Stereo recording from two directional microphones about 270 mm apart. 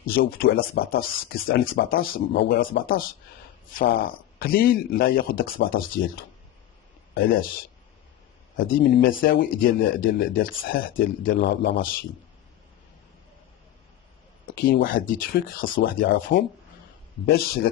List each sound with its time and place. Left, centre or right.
0.0 s speech: left
8.5 s speech: left
14.4 s speech: left